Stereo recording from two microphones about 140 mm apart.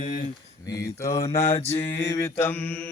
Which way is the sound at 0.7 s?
20° left (ahead or behind).